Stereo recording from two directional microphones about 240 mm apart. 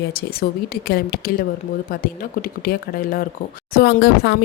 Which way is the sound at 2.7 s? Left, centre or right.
Left.